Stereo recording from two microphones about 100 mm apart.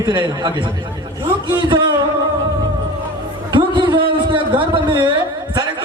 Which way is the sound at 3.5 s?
50° right (ahead or behind).